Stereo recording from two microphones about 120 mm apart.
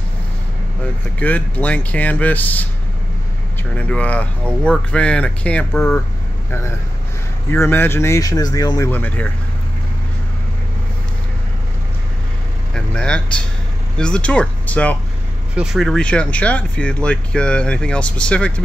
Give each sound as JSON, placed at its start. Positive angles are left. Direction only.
{"t": 1.2, "sound": "speech", "side_deg": 15}
{"t": 3.7, "sound": "speech", "side_deg": 10}
{"t": 7.5, "sound": "speech", "side_deg": 20}
{"t": 8.9, "sound": "speech", "side_deg": 15}
{"t": 12.7, "sound": "speech", "side_deg": 10}
{"t": 15.5, "sound": "speech", "side_deg": -5}